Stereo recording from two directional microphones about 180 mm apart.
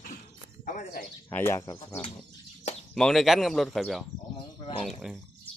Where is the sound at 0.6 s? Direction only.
50° left (ahead or behind).